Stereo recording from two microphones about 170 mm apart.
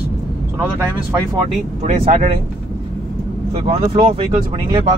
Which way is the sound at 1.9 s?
45° right (ahead or behind).